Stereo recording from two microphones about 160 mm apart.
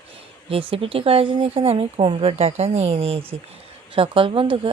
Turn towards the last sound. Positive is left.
turn(degrees=-35)  # may be behind; listen again after turning